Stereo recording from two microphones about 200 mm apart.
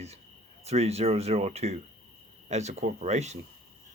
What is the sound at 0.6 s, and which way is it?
Speech, 30° right (ahead or behind).